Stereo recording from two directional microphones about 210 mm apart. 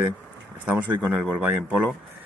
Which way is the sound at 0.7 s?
5° right (ahead or behind).